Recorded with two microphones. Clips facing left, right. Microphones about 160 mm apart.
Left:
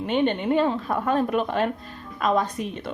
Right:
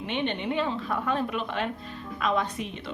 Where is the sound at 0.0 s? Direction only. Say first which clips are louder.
Left 7 dB; 40° left (ahead or behind).